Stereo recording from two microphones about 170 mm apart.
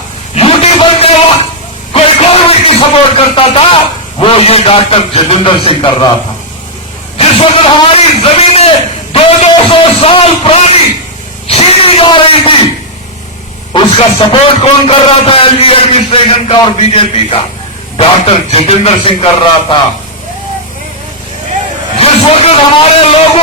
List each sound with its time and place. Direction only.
0.3 s a sound: 35° left (ahead or behind)
4.2 s a man's voice: 35° left (ahead or behind)
7.2 s speech: 35° left (ahead or behind)
13.7 s speech: 30° left (ahead or behind)
21.9 s a man's voice: 35° left (ahead or behind)